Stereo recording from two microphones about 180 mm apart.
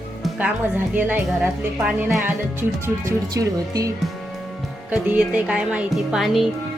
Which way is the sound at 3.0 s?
20° right (ahead or behind).